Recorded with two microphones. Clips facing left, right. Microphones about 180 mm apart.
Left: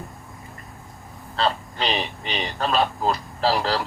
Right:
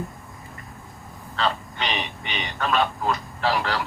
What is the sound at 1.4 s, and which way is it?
Speech, 35° left (ahead or behind).